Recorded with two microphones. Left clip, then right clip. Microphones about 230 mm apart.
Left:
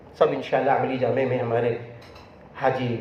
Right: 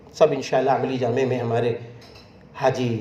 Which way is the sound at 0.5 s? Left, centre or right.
Right.